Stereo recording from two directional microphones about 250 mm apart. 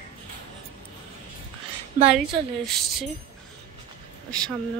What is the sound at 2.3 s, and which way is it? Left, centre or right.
Speech, centre.